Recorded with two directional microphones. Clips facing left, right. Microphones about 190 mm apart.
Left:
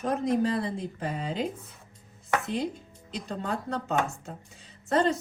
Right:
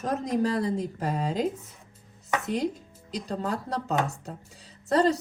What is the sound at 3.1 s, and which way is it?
A man's voice, 40° right (ahead or behind).